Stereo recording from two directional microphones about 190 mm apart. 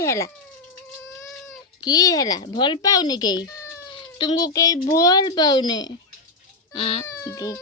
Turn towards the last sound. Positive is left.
turn(degrees=20)  # may be behind; listen again after turning